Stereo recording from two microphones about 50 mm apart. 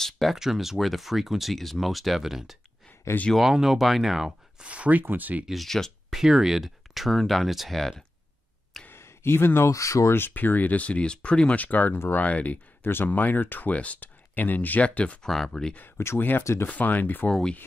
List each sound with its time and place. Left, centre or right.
0.0 s speech: centre
4.6 s speech: right
5.5 s speech: centre
6.0 s speech: centre
8.9 s a sound: left
9.7 s speech: left
10.1 s speech: left
11.6 s speech: left
12.8 s speech: left
15.2 s speech: centre
16.2 s speech: left
17.3 s speech: centre